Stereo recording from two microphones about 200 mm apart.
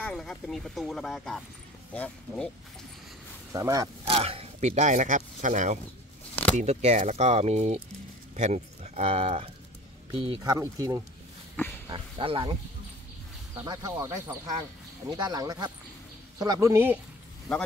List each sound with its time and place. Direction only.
0.0 s speech: 5° left (ahead or behind)
3.5 s speech: 15° right (ahead or behind)
4.0 s speech: 30° right (ahead or behind)
11.6 s speech: 10° left (ahead or behind)
11.9 s speech: 25° right (ahead or behind)
13.6 s speech: 20° right (ahead or behind)